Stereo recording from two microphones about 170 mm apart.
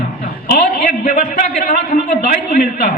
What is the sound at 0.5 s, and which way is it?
A man's voice, 60° left (ahead or behind).